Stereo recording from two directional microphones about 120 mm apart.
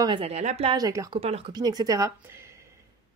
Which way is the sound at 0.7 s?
30° right (ahead or behind).